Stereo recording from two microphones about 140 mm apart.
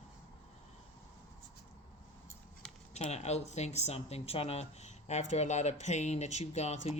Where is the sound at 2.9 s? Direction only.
50° left (ahead or behind).